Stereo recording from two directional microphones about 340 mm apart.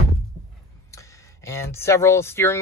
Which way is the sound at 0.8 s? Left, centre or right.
Centre.